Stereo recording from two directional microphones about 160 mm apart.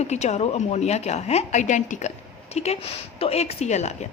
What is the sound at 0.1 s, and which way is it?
A woman's voice, 45° left (ahead or behind).